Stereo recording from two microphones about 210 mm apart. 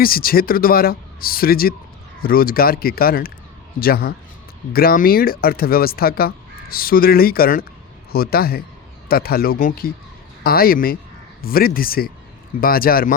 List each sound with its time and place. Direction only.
0.0 s speech: 45° left (ahead or behind)